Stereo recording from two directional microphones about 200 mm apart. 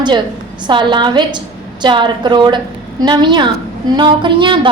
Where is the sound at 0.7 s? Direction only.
25° right (ahead or behind).